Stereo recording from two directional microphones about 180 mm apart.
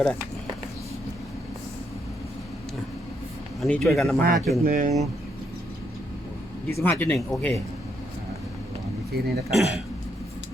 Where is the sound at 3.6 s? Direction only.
Centre (ahead or behind).